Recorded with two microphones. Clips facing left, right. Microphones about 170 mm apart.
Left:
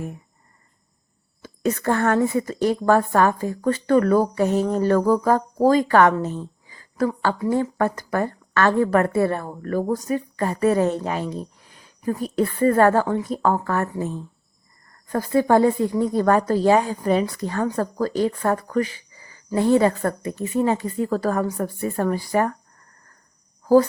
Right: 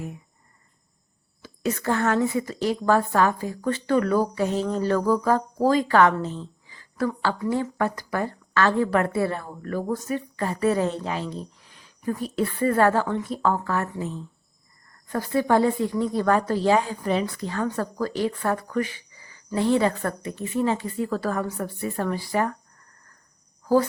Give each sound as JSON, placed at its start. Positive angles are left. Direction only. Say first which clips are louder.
{"t": 1.4, "sound": "a woman's voice", "louder": "left 4 dB", "side_deg": 50}